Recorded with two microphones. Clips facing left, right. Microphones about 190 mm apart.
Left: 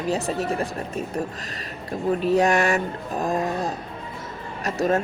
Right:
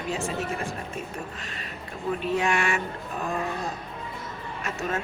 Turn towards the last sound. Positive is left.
turn(degrees=40)  # may be behind; listen again after turning